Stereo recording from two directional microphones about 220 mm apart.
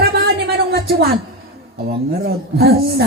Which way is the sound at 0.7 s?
45° right (ahead or behind).